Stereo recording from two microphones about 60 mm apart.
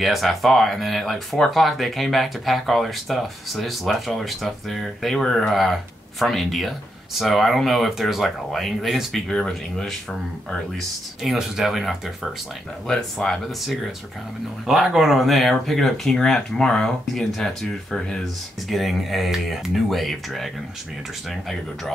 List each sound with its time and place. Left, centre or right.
0.0 s speech: centre
11.2 s speech: centre
14.7 s speech: centre